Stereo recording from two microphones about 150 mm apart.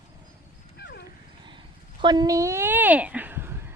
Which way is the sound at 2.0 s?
30° right (ahead or behind).